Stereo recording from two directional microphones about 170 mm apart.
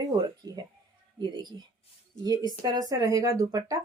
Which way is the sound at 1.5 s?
25° right (ahead or behind).